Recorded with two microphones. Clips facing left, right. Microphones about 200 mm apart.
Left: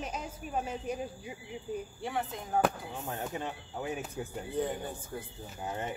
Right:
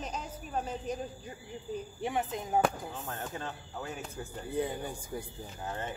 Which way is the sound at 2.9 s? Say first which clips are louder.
Left 2 dB; 20° left (ahead or behind).